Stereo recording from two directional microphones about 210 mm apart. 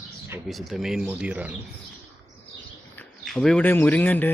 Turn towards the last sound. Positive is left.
turn(degrees=10)  # may be behind; listen again after turning